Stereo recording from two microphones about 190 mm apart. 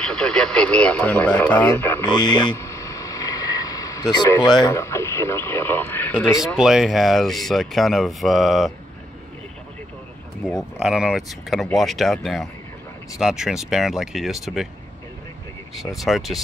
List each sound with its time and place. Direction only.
0.0 s speech: 5° left (ahead or behind)
2.0 s speech: 25° left (ahead or behind)
6.4 s speech: centre (ahead or behind)
10.4 s speech: centre (ahead or behind)
16.0 s speech: centre (ahead or behind)